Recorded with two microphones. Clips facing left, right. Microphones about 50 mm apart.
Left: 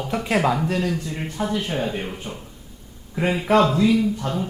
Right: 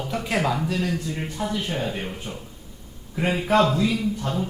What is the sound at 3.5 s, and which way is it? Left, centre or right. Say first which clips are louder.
Speech: left 2 dB; left.